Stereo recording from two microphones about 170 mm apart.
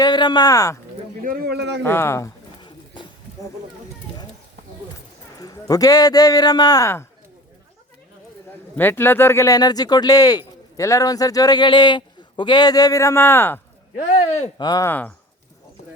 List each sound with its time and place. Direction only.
0.0 s speech: 25° left (ahead or behind)
1.2 s speech: 65° right (ahead or behind); by 1.8 s 85° right
1.8 s pigeon: 15° left (ahead or behind)
5.4 s speech: 20° left (ahead or behind)
8.7 s speech: 10° left (ahead or behind)
14.6 s speech: 20° left (ahead or behind)